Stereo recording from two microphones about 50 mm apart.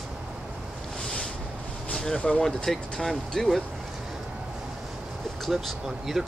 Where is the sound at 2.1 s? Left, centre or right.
Centre.